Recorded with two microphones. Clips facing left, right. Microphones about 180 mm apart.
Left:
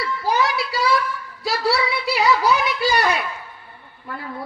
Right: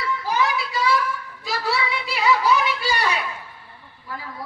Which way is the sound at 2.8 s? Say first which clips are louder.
Left 4 dB; 40° left (ahead or behind).